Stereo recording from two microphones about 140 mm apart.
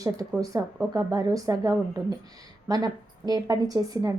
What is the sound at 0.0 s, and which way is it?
A woman's voice, 25° right (ahead or behind).